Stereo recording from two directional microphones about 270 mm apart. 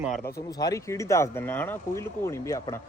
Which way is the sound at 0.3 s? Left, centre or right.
Centre.